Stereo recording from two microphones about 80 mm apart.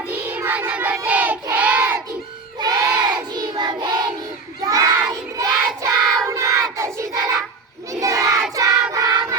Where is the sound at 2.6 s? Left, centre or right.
Right.